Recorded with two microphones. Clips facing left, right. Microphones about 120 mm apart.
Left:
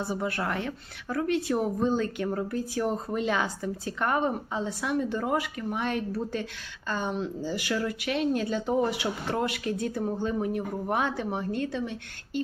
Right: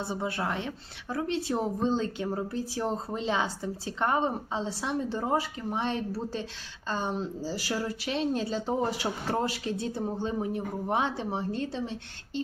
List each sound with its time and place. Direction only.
0.0 s a woman's voice: 25° right (ahead or behind)